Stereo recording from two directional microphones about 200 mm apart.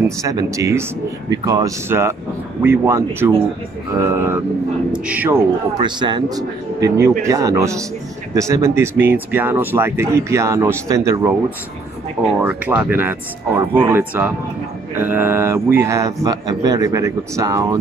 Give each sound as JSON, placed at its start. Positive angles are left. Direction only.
{"t": 0.2, "sound": "speech", "side_deg": -15}
{"t": 5.8, "sound": "speech", "side_deg": -20}
{"t": 12.4, "sound": "speech", "side_deg": -5}